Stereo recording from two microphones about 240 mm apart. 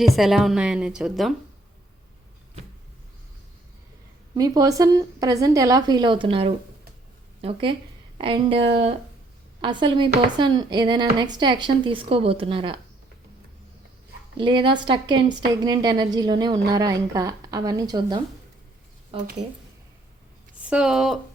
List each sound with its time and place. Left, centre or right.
0.0 s a woman's voice: centre
4.4 s a woman's voice: centre
14.3 s a woman's voice: centre
20.7 s a woman's voice: centre